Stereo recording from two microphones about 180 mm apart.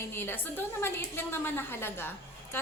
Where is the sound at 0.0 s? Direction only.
10° left (ahead or behind).